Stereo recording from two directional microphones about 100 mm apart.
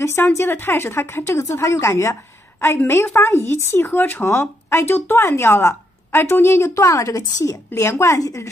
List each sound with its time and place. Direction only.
0.0 s a woman's voice: 25° left (ahead or behind)